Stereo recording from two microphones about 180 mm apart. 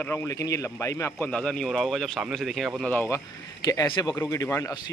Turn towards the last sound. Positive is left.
turn(degrees=15)  # may be behind; listen again after turning